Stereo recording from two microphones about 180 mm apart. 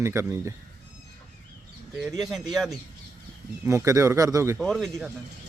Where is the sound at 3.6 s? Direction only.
15° right (ahead or behind).